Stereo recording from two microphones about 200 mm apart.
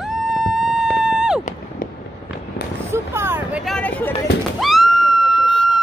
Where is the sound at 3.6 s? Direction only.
5° left (ahead or behind).